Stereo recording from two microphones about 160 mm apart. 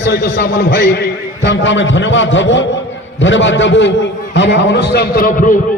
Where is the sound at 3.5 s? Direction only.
90° left.